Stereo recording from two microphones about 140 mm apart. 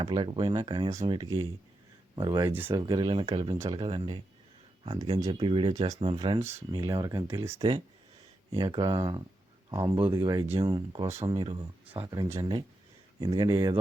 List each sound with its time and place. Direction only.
0.0 s speech: 35° right (ahead or behind)
6.7 s speech: 30° right (ahead or behind)